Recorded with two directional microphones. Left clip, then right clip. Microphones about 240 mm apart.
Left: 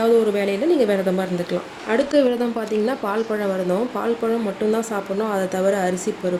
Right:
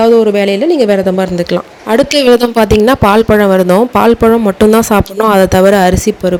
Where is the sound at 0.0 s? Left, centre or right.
Right.